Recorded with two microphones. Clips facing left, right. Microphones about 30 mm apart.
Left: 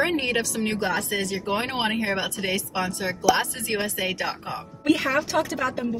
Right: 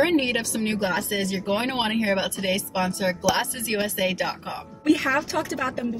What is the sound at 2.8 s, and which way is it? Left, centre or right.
Speech, right.